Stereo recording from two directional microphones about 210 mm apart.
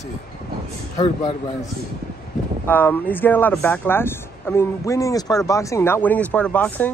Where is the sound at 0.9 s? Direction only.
25° left (ahead or behind).